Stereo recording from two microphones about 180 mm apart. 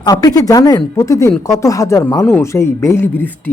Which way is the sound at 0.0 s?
20° left (ahead or behind).